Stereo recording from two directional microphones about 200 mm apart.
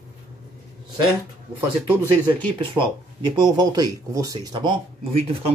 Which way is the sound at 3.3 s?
20° right (ahead or behind).